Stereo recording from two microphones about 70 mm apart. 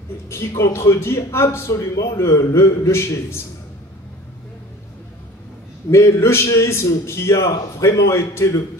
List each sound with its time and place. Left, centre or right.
0.7 s a man's voice: left
5.9 s a man's voice: left